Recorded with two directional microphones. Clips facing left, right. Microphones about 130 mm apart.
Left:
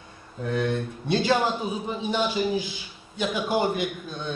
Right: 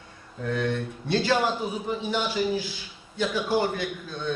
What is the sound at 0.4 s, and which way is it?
A man's voice, 20° left (ahead or behind).